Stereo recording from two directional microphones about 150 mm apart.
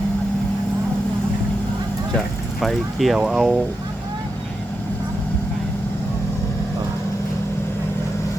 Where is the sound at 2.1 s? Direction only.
Centre (ahead or behind).